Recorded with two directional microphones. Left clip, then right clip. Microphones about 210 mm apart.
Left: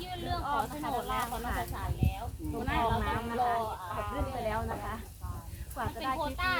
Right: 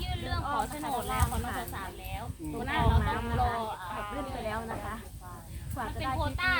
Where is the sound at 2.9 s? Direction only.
5° right (ahead or behind).